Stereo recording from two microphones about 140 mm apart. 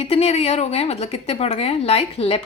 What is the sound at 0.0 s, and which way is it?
A woman's voice, 45° left (ahead or behind).